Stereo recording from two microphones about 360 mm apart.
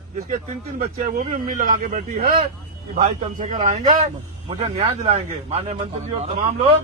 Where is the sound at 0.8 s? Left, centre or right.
Right.